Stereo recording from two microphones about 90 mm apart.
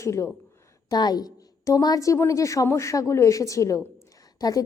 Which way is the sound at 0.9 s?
50° left (ahead or behind).